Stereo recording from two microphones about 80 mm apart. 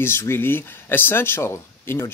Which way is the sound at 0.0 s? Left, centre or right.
Left.